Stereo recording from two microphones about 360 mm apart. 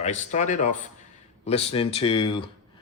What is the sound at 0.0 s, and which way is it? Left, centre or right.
Speech, centre.